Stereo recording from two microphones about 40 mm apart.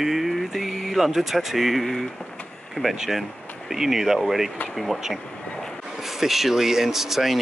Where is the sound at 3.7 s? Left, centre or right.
Centre.